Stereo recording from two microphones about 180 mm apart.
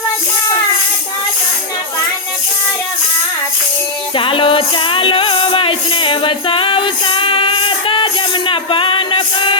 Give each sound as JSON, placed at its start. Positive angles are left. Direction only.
{"t": 4.1, "sound": "music", "side_deg": 30}